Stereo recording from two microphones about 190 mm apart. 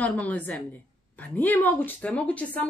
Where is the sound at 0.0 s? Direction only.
10° left (ahead or behind).